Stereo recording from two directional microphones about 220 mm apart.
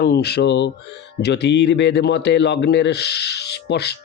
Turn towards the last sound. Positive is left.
turn(degrees=50)  # may be behind; listen again after turning